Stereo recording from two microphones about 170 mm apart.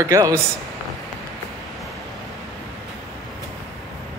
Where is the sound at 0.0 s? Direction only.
15° right (ahead or behind).